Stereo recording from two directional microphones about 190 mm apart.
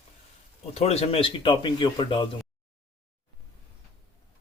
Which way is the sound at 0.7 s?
35° left (ahead or behind).